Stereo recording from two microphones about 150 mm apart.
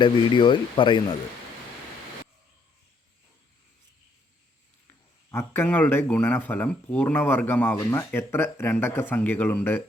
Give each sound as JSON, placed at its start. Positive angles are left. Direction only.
{"t": 0.0, "sound": "speech", "side_deg": 30}
{"t": 5.3, "sound": "speech", "side_deg": 15}